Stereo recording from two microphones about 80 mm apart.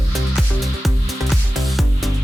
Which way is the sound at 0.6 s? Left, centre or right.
Centre.